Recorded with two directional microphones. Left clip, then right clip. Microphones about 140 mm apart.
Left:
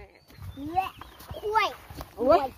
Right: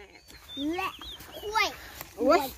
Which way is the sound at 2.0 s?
50° left (ahead or behind).